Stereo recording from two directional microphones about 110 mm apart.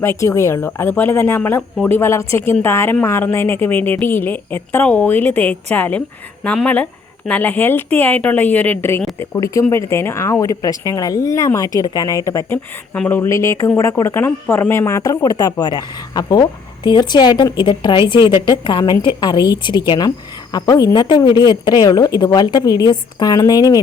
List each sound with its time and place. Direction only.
0.0 s a woman's voice: 20° left (ahead or behind)